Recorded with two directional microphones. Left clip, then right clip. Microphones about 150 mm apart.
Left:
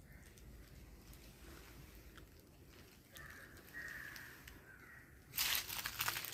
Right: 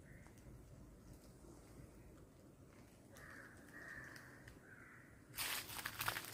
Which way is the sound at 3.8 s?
40° left (ahead or behind).